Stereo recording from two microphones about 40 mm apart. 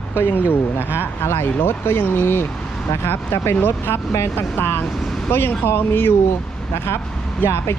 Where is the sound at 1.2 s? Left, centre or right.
Left.